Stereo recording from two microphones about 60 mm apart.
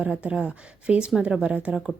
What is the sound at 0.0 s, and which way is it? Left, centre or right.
A woman's voice, centre.